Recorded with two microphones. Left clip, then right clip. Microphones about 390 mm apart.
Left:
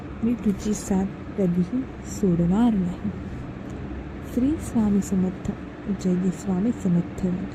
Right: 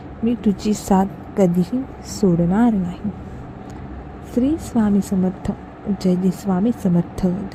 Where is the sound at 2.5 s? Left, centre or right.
Centre.